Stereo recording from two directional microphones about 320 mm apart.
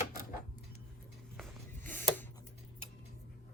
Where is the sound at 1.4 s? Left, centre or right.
Centre.